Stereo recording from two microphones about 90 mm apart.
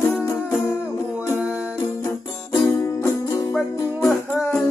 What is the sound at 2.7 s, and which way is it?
Music, 30° left (ahead or behind).